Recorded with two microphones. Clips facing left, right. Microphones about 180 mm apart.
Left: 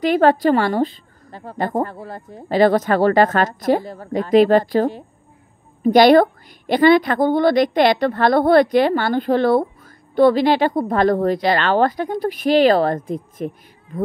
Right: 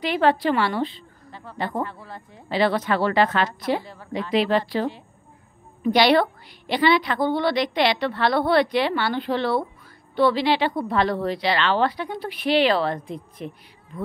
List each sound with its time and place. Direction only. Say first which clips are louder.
0.0 s a woman's voice: left 6 dB; 45° left (ahead or behind)